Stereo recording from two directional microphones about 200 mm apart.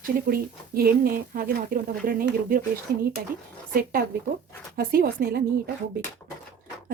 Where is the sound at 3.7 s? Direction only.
45° right (ahead or behind).